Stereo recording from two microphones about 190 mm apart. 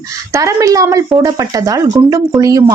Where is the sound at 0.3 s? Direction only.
15° right (ahead or behind).